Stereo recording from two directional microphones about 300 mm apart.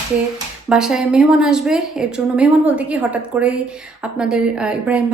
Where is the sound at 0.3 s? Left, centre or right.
Centre.